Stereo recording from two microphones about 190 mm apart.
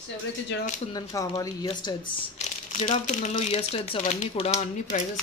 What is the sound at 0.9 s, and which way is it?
Speech, 20° left (ahead or behind).